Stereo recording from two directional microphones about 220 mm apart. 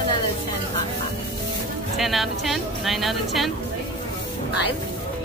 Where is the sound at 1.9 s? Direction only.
Centre (ahead or behind).